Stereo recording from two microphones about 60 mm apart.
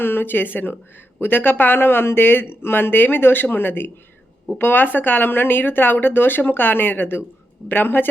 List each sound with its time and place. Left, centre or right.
0.0 s speech: left